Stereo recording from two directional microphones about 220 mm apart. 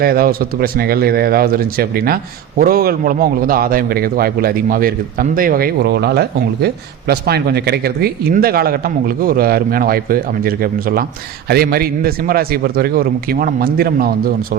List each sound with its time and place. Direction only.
0.0 s a man's voice: 45° right (ahead or behind)